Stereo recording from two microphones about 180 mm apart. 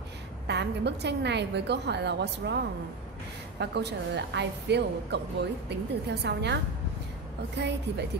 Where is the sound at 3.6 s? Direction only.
70° right (ahead or behind).